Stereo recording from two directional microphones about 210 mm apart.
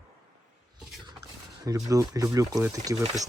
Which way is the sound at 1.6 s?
15° right (ahead or behind).